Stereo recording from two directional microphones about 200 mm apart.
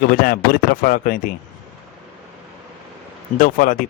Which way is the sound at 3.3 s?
45° left (ahead or behind).